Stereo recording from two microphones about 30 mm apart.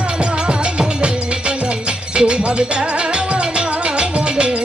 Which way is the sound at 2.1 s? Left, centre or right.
Right.